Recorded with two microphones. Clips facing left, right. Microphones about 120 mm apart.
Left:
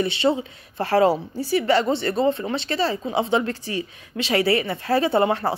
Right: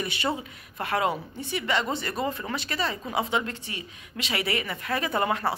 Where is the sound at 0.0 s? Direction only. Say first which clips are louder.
Left 8 dB; 25° left (ahead or behind).